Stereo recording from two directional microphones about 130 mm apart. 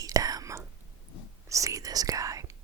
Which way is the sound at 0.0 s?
30° right (ahead or behind).